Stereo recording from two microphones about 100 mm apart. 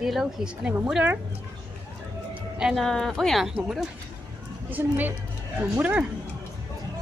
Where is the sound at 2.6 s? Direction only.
5° right (ahead or behind).